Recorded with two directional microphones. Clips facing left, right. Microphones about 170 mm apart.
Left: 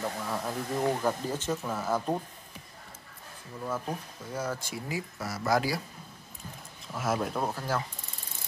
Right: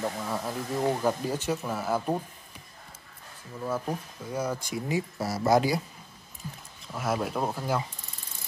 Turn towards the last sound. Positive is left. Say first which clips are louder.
# right 2 dB
turn(degrees=-15)  # may be behind; listen again after turning